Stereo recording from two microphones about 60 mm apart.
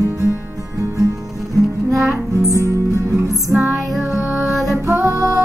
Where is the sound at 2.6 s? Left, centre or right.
Right.